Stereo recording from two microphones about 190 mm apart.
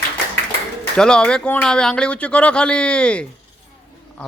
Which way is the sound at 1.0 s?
5° left (ahead or behind).